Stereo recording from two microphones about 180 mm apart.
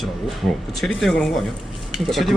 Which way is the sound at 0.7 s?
Centre (ahead or behind).